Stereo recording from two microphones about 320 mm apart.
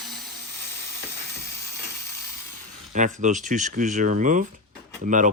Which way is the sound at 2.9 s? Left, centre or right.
Right.